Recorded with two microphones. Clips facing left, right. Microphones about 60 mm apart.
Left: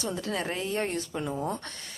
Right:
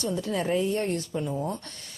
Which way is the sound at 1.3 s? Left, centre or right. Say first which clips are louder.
Left 1 dB; left.